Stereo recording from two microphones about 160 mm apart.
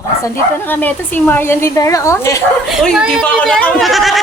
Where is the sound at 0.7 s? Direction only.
10° left (ahead or behind).